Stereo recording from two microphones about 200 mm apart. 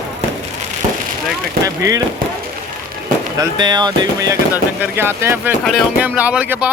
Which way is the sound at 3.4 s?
20° right (ahead or behind).